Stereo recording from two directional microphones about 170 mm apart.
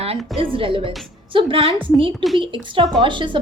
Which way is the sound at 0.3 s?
30° right (ahead or behind).